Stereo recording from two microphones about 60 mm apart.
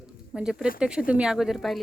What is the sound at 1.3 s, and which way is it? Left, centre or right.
Speech, centre.